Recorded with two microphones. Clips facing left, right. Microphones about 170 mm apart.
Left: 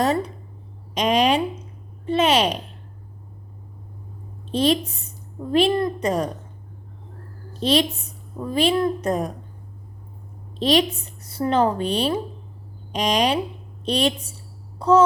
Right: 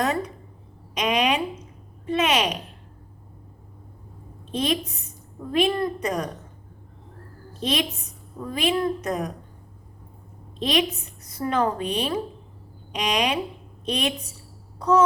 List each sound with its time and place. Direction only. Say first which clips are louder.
0.9 s a woman's voice: left 4 dB; 35° left (ahead or behind)
4.5 s a woman's voice: left 5 dB; 35° left (ahead or behind)
7.6 s a woman's voice: left 6 dB; 35° left (ahead or behind)
10.6 s a woman's voice: left 4 dB; 35° left (ahead or behind)
14.8 s a sound: left 3 dB; 30° left (ahead or behind)